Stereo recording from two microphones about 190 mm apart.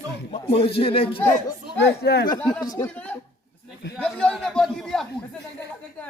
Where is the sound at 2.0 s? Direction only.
60° left (ahead or behind).